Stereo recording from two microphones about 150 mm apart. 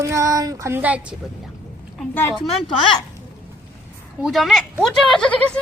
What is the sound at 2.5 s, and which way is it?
Speech, 35° left (ahead or behind).